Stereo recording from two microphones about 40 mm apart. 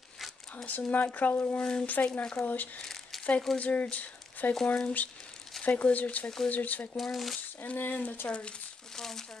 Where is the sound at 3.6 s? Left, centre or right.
Left.